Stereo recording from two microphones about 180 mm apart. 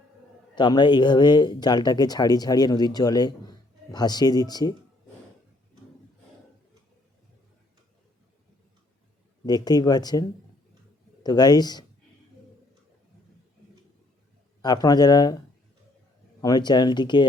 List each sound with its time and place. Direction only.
0.5 s speech: 25° left (ahead or behind)
9.5 s speech: 20° left (ahead or behind)
14.6 s speech: 20° left (ahead or behind)
16.4 s speech: 20° left (ahead or behind)